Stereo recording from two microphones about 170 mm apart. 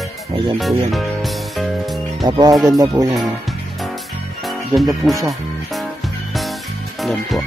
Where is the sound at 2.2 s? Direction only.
25° right (ahead or behind).